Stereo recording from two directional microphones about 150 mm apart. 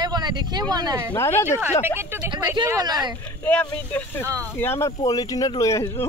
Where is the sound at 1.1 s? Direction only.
15° left (ahead or behind).